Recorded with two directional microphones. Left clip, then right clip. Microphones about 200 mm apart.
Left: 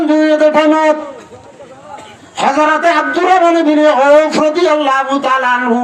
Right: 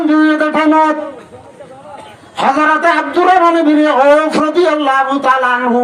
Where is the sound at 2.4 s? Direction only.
15° left (ahead or behind).